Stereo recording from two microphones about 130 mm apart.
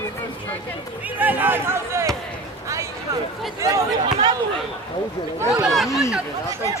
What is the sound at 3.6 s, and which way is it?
Speech, 30° right (ahead or behind).